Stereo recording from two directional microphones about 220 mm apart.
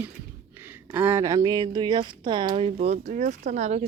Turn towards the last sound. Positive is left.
turn(degrees=-30)  # may be behind; listen again after turning